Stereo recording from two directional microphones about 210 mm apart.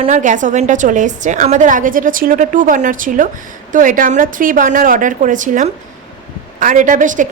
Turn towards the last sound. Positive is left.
turn(degrees=-40)  # may be behind; listen again after turning